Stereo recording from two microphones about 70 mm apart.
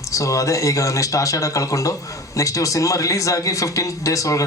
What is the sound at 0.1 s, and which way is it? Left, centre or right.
Speech, left.